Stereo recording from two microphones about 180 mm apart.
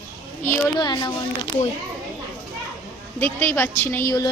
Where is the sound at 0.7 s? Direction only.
25° left (ahead or behind).